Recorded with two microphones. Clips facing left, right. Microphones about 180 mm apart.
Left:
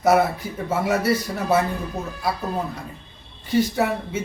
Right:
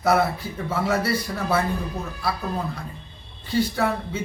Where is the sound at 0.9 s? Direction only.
20° left (ahead or behind).